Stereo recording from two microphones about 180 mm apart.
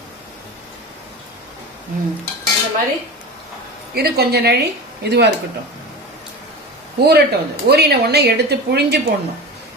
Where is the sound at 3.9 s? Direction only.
60° right (ahead or behind).